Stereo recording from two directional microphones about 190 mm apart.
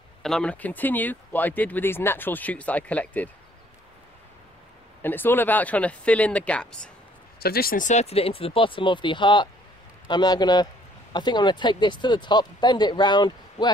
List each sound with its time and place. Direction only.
0.2 s speech: 5° left (ahead or behind)
5.0 s speech: 10° left (ahead or behind)
7.3 s speech: 55° left (ahead or behind); by 13.7 s 25° left (ahead or behind)